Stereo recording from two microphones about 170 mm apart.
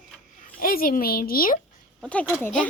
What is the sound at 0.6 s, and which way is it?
Speech, 60° left (ahead or behind).